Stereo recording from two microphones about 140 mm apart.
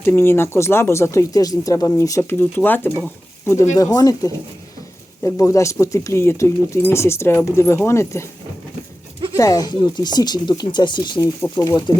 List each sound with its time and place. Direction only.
0.0 s speech: 15° left (ahead or behind)
9.3 s speech: 25° left (ahead or behind)
11.3 s speech: 20° left (ahead or behind)